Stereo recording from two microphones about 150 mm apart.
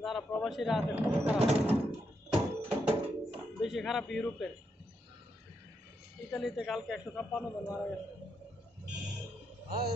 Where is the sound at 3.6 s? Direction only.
Centre (ahead or behind).